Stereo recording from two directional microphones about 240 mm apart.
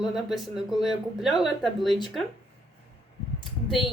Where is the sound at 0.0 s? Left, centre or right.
Centre.